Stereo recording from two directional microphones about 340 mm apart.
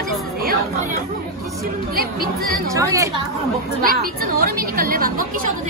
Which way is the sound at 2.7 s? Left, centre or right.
Centre.